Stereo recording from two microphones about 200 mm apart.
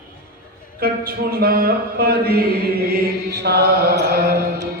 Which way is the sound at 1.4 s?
50° right (ahead or behind).